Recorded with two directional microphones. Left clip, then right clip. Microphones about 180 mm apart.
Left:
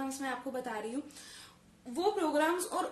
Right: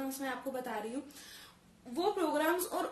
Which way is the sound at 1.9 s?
20° left (ahead or behind).